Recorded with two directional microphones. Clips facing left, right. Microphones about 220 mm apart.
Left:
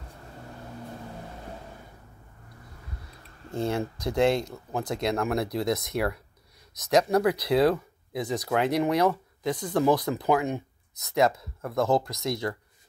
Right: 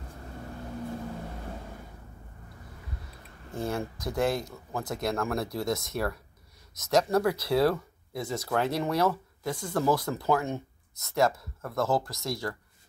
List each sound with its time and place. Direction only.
3.5 s speech: 20° left (ahead or behind)